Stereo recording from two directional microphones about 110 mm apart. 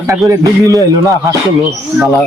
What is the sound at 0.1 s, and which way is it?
Speech, 30° right (ahead or behind).